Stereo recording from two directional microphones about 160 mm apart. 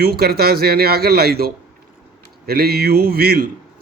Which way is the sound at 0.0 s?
75° right (ahead or behind).